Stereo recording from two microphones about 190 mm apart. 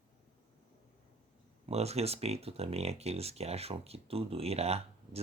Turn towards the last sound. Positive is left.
turn(degrees=-35)  # may be behind; listen again after turning